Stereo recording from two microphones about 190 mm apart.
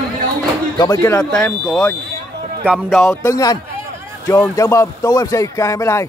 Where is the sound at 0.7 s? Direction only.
20° left (ahead or behind).